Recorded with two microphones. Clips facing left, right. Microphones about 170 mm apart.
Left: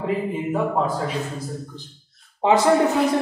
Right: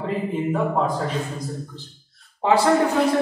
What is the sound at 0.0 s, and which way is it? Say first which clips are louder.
Speech: even; 5° left (ahead or behind).